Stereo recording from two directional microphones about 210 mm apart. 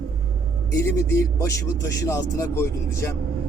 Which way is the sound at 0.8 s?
15° left (ahead or behind).